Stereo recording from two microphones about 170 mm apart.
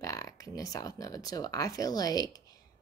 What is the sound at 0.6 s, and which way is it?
A woman's voice, 20° left (ahead or behind).